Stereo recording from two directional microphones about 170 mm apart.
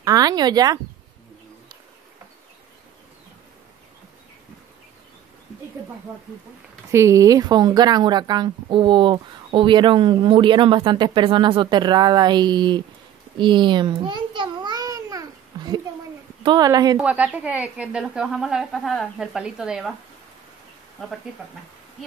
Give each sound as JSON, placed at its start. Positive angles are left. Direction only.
{"t": 0.0, "sound": "speech", "side_deg": -20}
{"t": 6.9, "sound": "speech", "side_deg": -15}
{"t": 13.4, "sound": "a sound", "side_deg": -30}
{"t": 16.4, "sound": "speech", "side_deg": -25}
{"t": 17.0, "sound": "speech", "side_deg": -10}